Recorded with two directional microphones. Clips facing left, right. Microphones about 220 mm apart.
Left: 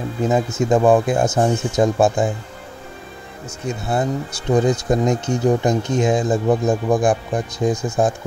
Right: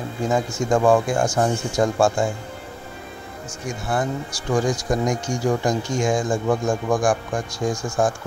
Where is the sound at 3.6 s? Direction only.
25° left (ahead or behind).